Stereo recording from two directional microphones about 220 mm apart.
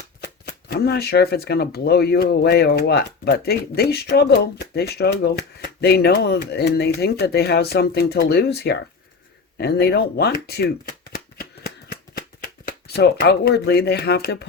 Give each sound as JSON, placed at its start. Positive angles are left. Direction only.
{"t": 0.2, "sound": "speech", "side_deg": 45}
{"t": 11.3, "sound": "shuffling cards", "side_deg": 45}
{"t": 12.6, "sound": "speech", "side_deg": 45}